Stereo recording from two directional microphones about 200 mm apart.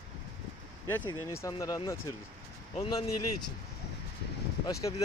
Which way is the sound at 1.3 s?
15° left (ahead or behind).